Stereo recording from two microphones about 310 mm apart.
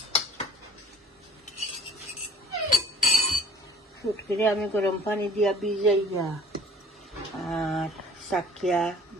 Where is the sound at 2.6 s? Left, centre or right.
Left.